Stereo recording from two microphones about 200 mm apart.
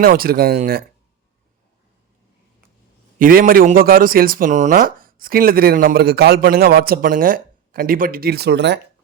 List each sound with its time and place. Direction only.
0.0 s speech: 50° right (ahead or behind)
3.2 s speech: 45° right (ahead or behind)